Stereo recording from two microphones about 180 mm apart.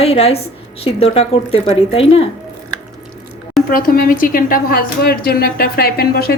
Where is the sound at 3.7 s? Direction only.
50° left (ahead or behind).